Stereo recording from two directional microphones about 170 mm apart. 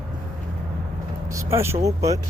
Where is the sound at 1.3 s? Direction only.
15° right (ahead or behind).